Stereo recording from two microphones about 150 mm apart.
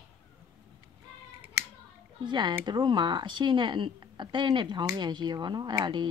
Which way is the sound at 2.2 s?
30° right (ahead or behind).